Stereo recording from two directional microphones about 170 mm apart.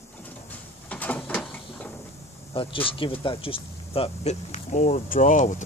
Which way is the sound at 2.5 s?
30° left (ahead or behind).